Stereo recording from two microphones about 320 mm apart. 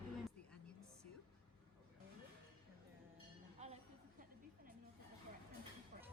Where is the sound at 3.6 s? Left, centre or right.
Right.